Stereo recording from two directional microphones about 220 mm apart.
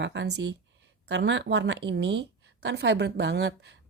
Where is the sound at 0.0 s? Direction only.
55° right (ahead or behind).